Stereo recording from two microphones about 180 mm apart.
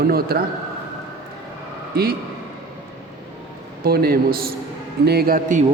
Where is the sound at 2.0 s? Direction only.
55° right (ahead or behind).